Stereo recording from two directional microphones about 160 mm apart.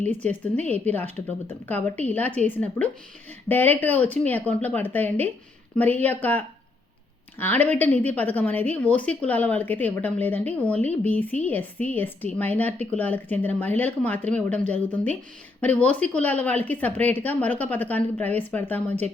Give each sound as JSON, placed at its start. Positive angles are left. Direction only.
{"t": 0.0, "sound": "a woman's voice", "side_deg": 10}
{"t": 14.7, "sound": "speech", "side_deg": -45}
{"t": 15.6, "sound": "a woman's voice", "side_deg": 10}